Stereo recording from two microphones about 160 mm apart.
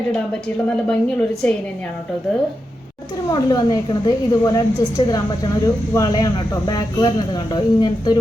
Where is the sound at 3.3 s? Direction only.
25° left (ahead or behind).